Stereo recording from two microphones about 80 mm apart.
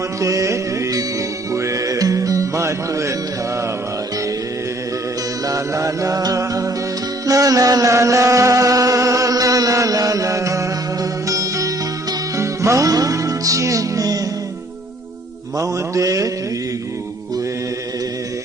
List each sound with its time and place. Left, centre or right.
0.2 s music: right
5.5 s music: right
15.5 s mantra: right